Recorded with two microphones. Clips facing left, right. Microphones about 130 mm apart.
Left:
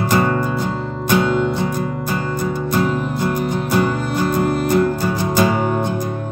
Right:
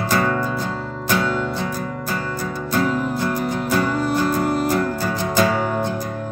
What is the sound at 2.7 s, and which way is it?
Music, 20° left (ahead or behind).